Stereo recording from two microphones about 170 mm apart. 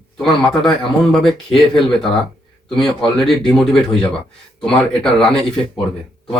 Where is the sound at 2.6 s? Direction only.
5° left (ahead or behind).